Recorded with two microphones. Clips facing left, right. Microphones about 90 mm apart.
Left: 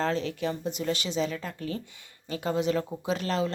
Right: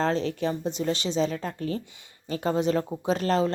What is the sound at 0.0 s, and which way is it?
A woman's voice, 35° right (ahead or behind).